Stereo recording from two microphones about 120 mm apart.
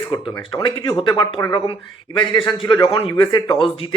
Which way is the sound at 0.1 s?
30° left (ahead or behind).